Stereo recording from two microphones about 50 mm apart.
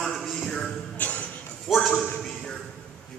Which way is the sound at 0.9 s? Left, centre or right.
Left.